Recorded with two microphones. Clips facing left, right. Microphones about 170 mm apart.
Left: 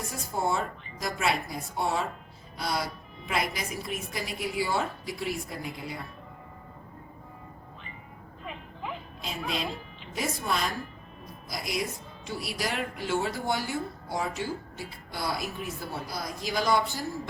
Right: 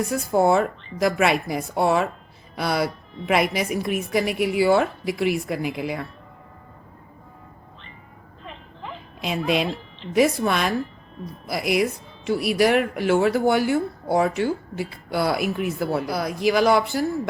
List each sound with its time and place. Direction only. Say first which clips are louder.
0.1 s speech: right 10 dB; 75° right (ahead or behind)
8.4 s a sound: even; 5° left (ahead or behind)
10.2 s speech: right 11 dB; 75° right (ahead or behind)